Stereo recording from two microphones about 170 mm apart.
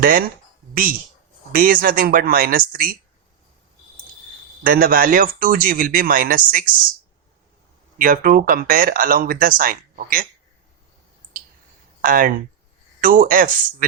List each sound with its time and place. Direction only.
0.0 s speech: 55° right (ahead or behind)
4.6 s speech: 55° right (ahead or behind)
7.9 s speech: 55° right (ahead or behind)
12.0 s speech: 55° right (ahead or behind)